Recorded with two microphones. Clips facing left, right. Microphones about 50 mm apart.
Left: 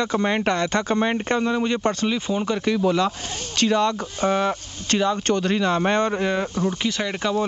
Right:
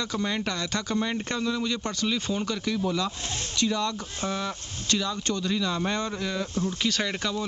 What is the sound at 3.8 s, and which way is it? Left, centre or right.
Speech, left.